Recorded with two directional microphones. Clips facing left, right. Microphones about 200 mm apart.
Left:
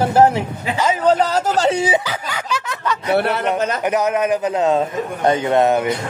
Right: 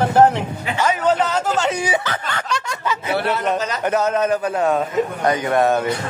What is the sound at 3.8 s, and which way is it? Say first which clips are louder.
A man's voice: left 1 dB; 15° left (ahead or behind).